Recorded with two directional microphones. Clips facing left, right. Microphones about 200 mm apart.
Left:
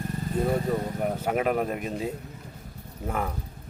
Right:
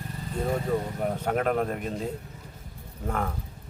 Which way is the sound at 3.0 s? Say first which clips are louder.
Even; 5° left (ahead or behind).